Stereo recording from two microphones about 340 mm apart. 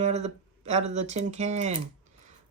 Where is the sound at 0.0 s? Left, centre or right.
Centre.